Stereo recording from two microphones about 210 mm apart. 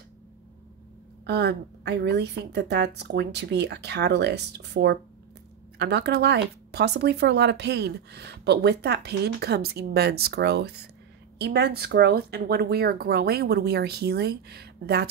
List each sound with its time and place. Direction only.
1.2 s speech: 50° right (ahead or behind)